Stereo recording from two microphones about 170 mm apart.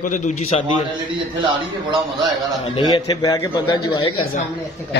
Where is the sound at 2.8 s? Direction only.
25° left (ahead or behind).